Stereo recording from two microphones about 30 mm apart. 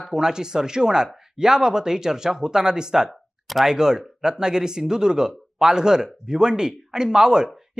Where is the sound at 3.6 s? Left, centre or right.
Right.